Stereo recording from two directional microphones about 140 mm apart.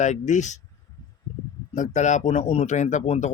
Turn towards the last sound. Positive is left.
turn(degrees=60)  # may be behind; listen again after turning